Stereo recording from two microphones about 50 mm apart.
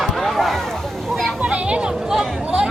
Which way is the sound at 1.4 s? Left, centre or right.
Right.